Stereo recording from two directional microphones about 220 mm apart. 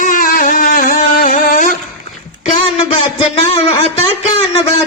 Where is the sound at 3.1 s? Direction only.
25° left (ahead or behind).